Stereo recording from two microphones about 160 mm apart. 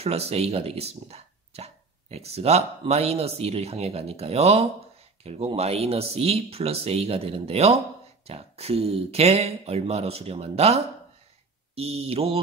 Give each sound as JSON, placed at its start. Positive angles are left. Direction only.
{"t": 0.0, "sound": "speech", "side_deg": -40}